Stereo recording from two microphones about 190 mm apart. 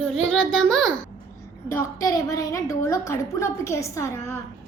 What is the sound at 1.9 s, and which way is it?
A woman's voice, 20° left (ahead or behind).